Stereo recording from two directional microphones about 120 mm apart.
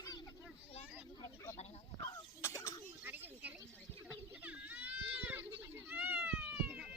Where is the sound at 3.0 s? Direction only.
15° right (ahead or behind).